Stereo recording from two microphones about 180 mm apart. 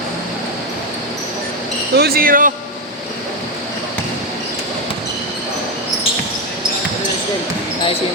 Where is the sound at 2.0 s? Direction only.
55° right (ahead or behind).